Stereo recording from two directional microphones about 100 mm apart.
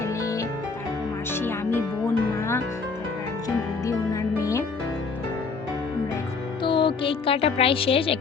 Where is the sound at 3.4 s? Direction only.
35° left (ahead or behind).